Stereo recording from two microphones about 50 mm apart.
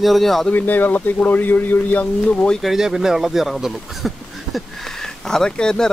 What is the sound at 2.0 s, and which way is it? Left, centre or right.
Speech, left.